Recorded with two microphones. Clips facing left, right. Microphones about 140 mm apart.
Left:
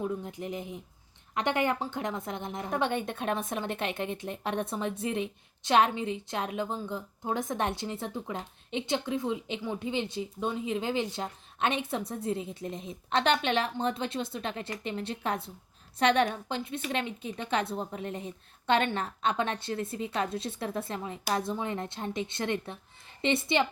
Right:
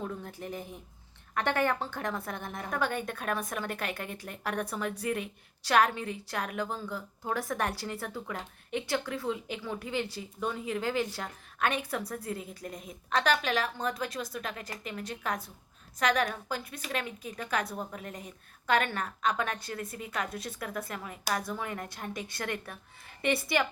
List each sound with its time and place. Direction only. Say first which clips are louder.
0.0 s a woman's voice: left 4 dB; 20° left (ahead or behind)